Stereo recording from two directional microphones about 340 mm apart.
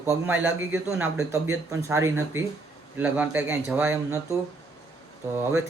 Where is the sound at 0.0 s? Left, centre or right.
Centre.